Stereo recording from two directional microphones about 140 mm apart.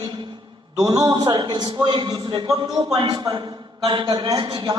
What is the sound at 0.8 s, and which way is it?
A man's voice, 25° right (ahead or behind).